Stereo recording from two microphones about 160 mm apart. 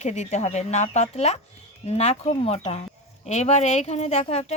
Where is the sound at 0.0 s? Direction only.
45° left (ahead or behind).